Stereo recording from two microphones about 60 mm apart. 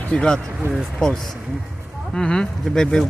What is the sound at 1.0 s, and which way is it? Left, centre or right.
Speech, centre.